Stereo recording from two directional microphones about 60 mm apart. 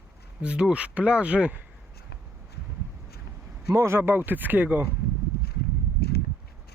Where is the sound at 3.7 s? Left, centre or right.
Right.